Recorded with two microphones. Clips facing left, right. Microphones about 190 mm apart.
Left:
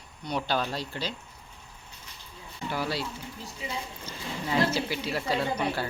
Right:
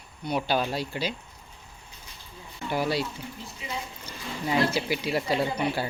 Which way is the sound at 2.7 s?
15° right (ahead or behind).